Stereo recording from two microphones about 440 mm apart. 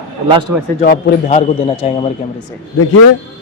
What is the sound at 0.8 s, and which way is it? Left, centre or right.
A man's voice, centre.